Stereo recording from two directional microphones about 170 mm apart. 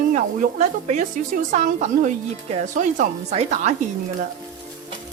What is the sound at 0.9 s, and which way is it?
Speech, 45° right (ahead or behind).